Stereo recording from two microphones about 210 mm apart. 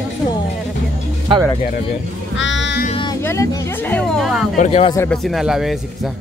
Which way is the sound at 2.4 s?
60° left (ahead or behind).